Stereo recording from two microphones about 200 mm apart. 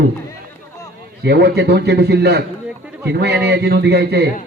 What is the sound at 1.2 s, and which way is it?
A man's voice, 55° right (ahead or behind).